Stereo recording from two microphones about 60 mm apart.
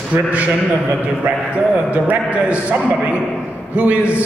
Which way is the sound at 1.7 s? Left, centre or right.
Right.